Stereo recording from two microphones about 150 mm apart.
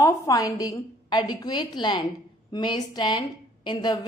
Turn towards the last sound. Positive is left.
turn(degrees=30)  # may be behind; listen again after turning